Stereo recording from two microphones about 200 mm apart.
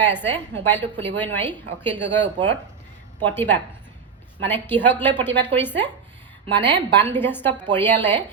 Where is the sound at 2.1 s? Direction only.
60° right (ahead or behind).